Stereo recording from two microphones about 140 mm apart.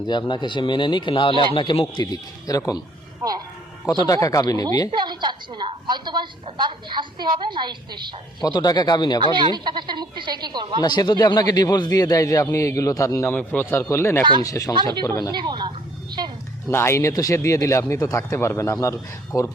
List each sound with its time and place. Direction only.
0.1 s speech: 35° left (ahead or behind)
2.5 s speech: 25° left (ahead or behind)
3.8 s speech: 25° left (ahead or behind)
4.9 s a woman's voice: 35° right (ahead or behind)
8.4 s speech: 30° left (ahead or behind)
9.2 s a woman's voice: 35° right (ahead or behind)
10.8 s speech: 30° left (ahead or behind)
13.2 s speech: 10° left (ahead or behind)
15.3 s a woman's voice: 30° right (ahead or behind)
16.6 s speech: 20° left (ahead or behind)